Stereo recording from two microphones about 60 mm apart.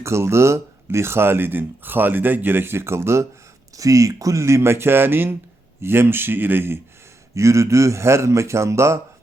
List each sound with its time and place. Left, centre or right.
0.0 s speech: right
3.8 s speech: right
7.3 s a man's voice: right